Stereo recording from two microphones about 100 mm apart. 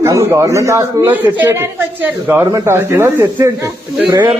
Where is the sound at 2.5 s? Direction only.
30° right (ahead or behind).